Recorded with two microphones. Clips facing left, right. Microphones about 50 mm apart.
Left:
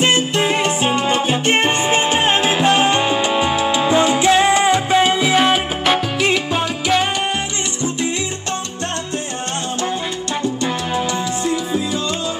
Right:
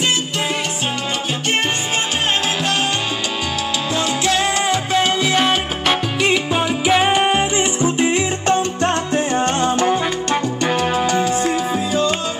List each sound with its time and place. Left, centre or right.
2.6 s salsa music: left; by 7.0 s centre
7.0 s music: centre